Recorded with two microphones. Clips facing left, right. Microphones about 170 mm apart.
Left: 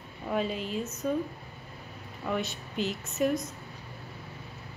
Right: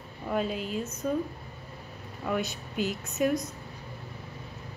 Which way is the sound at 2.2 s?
Centre (ahead or behind).